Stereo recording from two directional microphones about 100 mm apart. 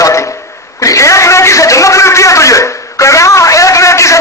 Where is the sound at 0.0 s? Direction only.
30° left (ahead or behind).